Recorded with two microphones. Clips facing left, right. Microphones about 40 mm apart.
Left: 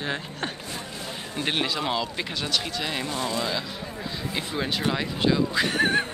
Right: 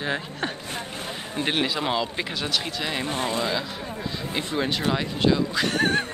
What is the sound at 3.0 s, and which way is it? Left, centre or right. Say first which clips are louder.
Speech: right 4 dB; right.